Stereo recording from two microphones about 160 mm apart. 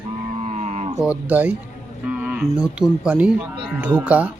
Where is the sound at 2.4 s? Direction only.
5° right (ahead or behind).